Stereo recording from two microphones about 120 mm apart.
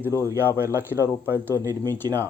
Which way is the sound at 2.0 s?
30° right (ahead or behind).